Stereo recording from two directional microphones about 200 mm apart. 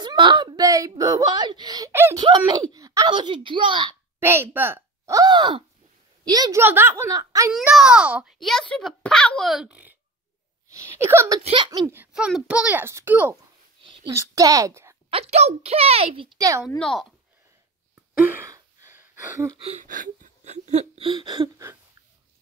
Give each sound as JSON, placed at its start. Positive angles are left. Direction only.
{"t": 0.0, "sound": "speech", "side_deg": -25}
{"t": 4.2, "sound": "a child's voice", "side_deg": -10}
{"t": 7.5, "sound": "a child's voice", "side_deg": 0}
{"t": 15.0, "sound": "speech", "side_deg": -30}
{"t": 16.6, "sound": "a child's voice", "side_deg": 0}
{"t": 18.2, "sound": "gasp", "side_deg": -10}
{"t": 19.6, "sound": "whimper", "side_deg": -35}